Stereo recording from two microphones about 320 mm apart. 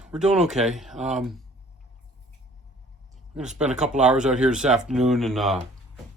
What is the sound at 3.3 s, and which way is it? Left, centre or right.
Speech, centre.